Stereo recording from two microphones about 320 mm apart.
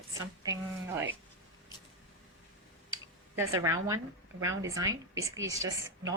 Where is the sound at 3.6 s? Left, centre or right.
Centre.